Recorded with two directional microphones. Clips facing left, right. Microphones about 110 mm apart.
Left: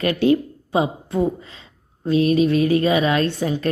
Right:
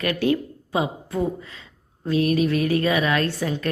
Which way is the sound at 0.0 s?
25° left (ahead or behind).